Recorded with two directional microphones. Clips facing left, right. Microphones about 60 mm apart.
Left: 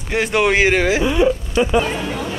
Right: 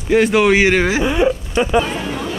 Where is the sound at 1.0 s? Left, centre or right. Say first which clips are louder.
Even; right.